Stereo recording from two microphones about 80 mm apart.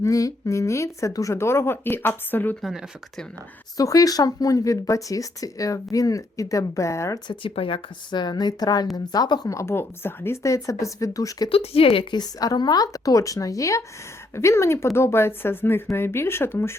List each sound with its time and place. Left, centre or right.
0.0 s speech: left
2.6 s speech: centre
3.8 s speech: left
7.3 s a woman's voice: left
9.5 s speech: left